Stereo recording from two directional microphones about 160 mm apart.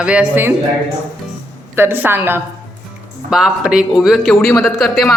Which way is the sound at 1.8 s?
15° right (ahead or behind).